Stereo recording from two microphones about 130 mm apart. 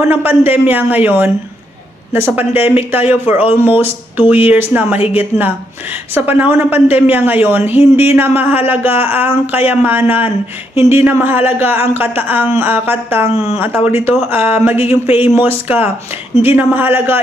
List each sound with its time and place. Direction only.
0.1 s a woman's voice: 15° right (ahead or behind)
6.1 s a woman's voice: 15° right (ahead or behind)